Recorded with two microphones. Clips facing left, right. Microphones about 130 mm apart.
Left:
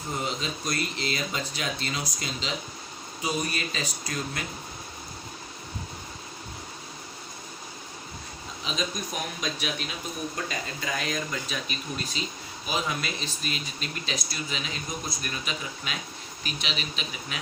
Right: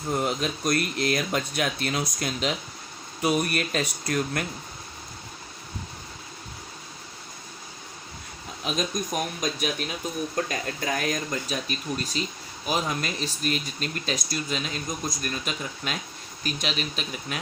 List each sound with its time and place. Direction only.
0.3 s speech: 55° right (ahead or behind)
8.6 s speech: 50° right (ahead or behind)